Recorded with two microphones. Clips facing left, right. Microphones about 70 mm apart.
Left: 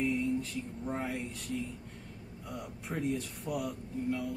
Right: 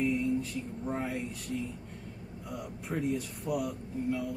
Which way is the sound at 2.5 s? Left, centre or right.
Centre.